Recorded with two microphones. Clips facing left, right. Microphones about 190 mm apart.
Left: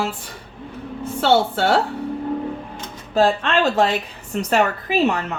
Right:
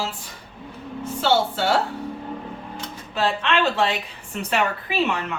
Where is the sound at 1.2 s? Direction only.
60° left (ahead or behind).